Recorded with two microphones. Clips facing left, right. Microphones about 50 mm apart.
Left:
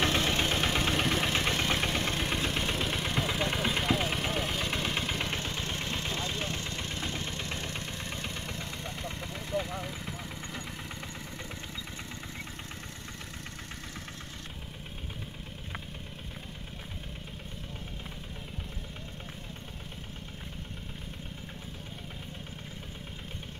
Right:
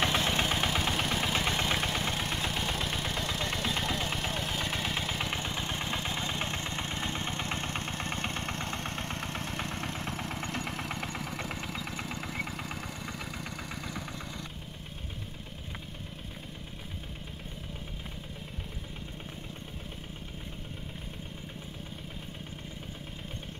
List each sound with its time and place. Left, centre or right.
0.0 s vehicle: centre
5.4 s vehicle: centre; by 11.1 s right